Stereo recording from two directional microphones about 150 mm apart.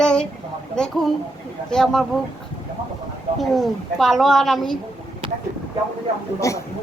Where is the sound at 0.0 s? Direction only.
5° left (ahead or behind).